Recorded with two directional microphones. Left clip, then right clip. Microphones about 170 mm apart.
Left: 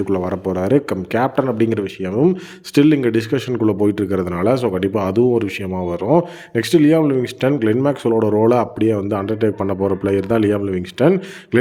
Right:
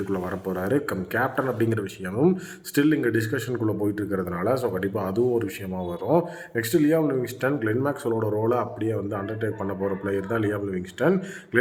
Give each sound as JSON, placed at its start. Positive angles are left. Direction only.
{"t": 0.1, "sound": "speech", "side_deg": 45}
{"t": 6.5, "sound": "speech", "side_deg": 50}